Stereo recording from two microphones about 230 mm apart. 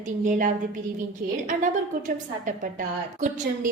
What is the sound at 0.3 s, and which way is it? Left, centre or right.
A woman's voice, right.